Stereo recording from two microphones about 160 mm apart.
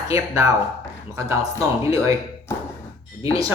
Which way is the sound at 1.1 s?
20° right (ahead or behind).